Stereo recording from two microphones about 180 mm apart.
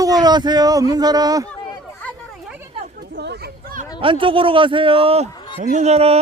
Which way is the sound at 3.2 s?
65° right (ahead or behind).